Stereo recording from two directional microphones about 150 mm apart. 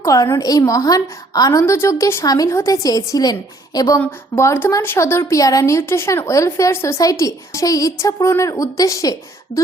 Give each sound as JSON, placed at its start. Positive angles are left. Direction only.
{"t": 0.0, "sound": "a woman's voice", "side_deg": 20}